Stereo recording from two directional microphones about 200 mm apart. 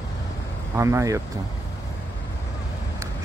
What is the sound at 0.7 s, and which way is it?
Speech, 15° right (ahead or behind).